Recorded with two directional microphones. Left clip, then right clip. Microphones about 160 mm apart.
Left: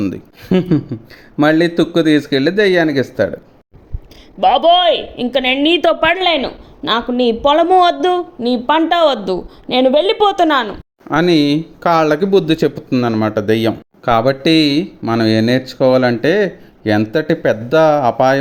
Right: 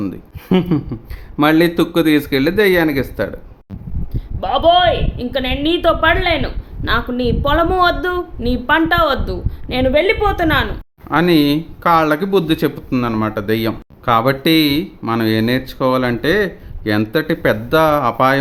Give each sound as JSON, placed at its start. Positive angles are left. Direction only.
{"t": 0.4, "sound": "speech", "side_deg": 5}
{"t": 4.1, "sound": "a woman's voice", "side_deg": 45}